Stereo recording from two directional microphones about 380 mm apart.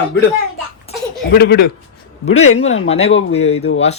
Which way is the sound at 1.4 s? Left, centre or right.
Left.